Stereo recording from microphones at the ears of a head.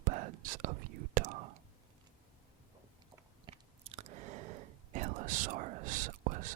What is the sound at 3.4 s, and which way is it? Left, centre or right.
Chewing, right.